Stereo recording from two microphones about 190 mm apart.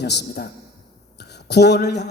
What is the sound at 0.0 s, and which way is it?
A man's voice, 60° left (ahead or behind).